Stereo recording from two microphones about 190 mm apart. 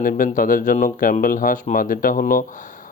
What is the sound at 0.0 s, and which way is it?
Speech, 45° left (ahead or behind).